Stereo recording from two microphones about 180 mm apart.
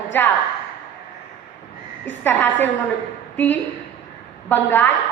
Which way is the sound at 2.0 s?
10° left (ahead or behind).